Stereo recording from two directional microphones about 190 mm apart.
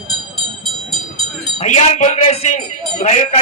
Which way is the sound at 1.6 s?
35° left (ahead or behind).